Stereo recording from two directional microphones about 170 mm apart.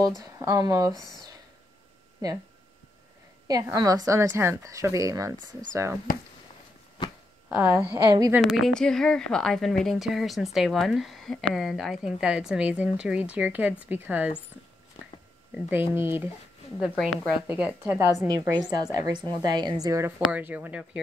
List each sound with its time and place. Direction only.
0.2 s a woman's voice: 20° right (ahead or behind)
3.4 s a woman's voice: 20° right (ahead or behind)
7.4 s a woman's voice: 10° right (ahead or behind)
8.4 s a woman's voice: centre (ahead or behind)
15.9 s a woman's voice: 15° right (ahead or behind)
20.3 s a woman's voice: 10° right (ahead or behind)